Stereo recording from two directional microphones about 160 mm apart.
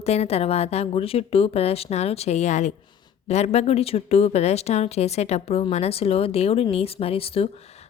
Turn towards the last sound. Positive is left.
turn(degrees=35)  # may be behind; listen again after turning